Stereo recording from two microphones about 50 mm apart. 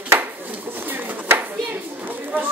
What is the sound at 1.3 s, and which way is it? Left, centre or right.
Clapping, right.